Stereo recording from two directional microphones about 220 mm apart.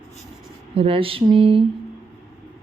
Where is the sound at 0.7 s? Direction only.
25° right (ahead or behind).